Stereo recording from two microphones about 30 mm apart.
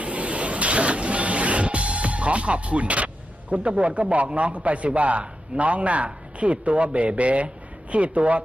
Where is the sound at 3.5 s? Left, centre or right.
Right.